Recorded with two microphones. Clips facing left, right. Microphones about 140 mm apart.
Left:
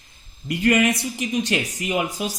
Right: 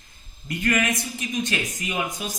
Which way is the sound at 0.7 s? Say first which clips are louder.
Left 5 dB; 25° left (ahead or behind).